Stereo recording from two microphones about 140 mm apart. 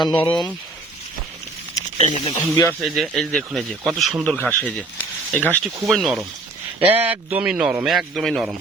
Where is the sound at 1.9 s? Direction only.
50° left (ahead or behind).